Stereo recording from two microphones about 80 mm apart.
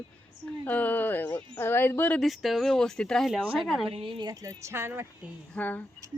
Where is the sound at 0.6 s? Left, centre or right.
Centre.